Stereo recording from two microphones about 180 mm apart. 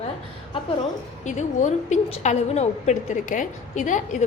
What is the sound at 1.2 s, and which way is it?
A woman's voice, 40° left (ahead or behind).